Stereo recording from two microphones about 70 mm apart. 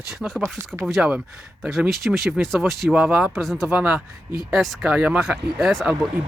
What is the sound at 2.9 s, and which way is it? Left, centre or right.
Speech, centre.